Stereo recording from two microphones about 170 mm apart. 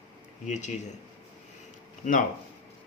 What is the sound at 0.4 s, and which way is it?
Speech, 45° left (ahead or behind).